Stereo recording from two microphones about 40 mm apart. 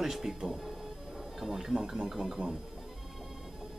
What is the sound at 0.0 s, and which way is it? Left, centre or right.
Speech, centre.